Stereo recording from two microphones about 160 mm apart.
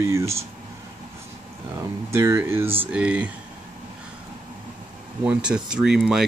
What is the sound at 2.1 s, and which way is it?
Speech, 15° right (ahead or behind).